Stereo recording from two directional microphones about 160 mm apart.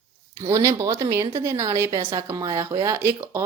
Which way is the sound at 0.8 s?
20° right (ahead or behind).